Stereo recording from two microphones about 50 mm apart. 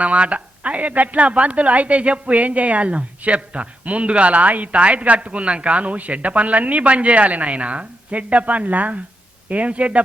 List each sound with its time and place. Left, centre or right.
0.0 s a woman's voice: right